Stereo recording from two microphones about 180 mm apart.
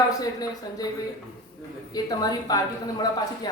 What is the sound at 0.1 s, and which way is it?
Speech, 20° left (ahead or behind).